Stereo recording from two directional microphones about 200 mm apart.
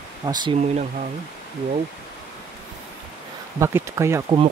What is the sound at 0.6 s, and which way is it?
Speech, 35° right (ahead or behind).